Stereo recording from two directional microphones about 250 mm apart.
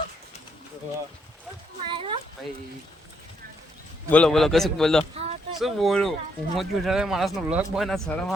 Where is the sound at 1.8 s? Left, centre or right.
Centre.